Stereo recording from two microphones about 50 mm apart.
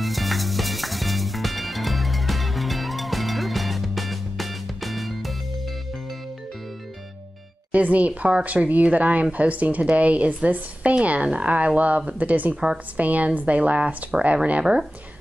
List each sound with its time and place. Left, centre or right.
0.0 s music: centre
7.7 s speech: right